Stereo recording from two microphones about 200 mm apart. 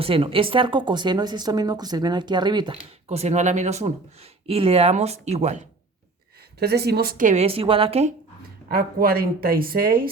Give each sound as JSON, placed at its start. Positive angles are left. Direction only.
{"t": 0.0, "sound": "speech", "side_deg": -25}
{"t": 3.1, "sound": "speech", "side_deg": -35}
{"t": 6.6, "sound": "speech", "side_deg": -55}
{"t": 8.7, "sound": "speech", "side_deg": -50}